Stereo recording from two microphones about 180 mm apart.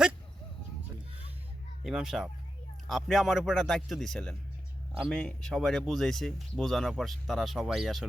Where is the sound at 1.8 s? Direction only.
Centre (ahead or behind).